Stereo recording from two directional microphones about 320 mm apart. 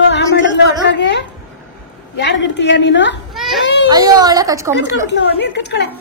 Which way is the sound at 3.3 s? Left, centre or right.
Centre.